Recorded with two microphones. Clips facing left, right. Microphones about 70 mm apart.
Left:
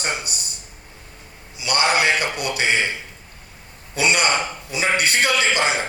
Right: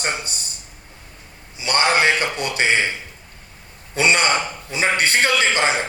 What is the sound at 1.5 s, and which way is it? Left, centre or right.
A man's voice, right.